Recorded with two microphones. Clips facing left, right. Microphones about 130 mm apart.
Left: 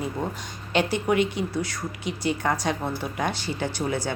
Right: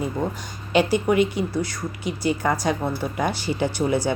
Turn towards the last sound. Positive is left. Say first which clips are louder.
# right 5 dB
turn(degrees=-10)  # may be behind; listen again after turning